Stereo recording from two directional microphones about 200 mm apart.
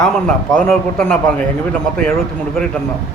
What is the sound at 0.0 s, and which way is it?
A man's voice, 5° left (ahead or behind).